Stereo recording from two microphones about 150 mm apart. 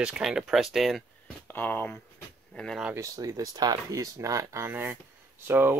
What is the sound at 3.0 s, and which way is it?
Speech, 25° right (ahead or behind).